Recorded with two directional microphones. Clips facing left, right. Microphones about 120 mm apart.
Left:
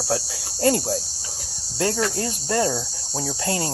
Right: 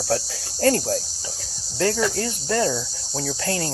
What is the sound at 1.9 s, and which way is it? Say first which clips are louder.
Speech: right 1 dB; 25° left (ahead or behind).